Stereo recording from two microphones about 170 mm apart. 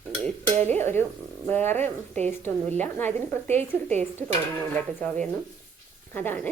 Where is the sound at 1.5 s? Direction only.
10° left (ahead or behind).